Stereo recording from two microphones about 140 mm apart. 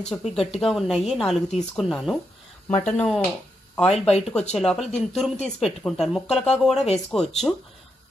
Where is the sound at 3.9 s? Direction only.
50° left (ahead or behind).